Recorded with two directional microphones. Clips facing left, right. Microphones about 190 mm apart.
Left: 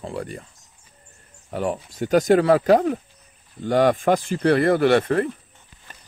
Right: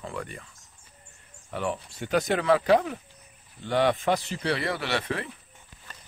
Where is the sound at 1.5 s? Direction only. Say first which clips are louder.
Left 5 dB; 40° left (ahead or behind).